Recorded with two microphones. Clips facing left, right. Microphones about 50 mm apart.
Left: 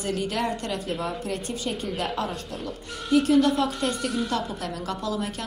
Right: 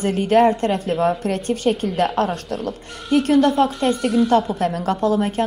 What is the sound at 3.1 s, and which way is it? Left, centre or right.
Speech, right.